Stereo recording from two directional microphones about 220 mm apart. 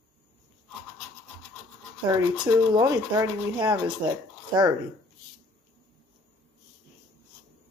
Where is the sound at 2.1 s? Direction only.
15° right (ahead or behind).